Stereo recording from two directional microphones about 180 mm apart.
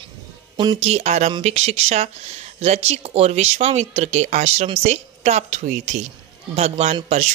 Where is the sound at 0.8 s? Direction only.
40° right (ahead or behind).